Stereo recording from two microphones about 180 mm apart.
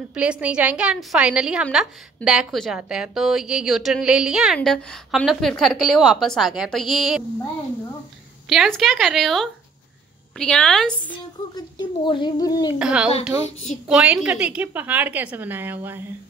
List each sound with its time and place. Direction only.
0.1 s a woman's voice: 5° right (ahead or behind)
8.5 s a woman's voice: centre (ahead or behind)
11.5 s speech: 25° left (ahead or behind)
12.7 s a woman's voice: 5° right (ahead or behind)